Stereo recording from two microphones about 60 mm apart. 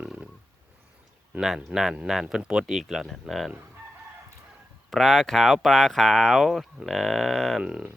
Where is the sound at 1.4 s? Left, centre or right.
Centre.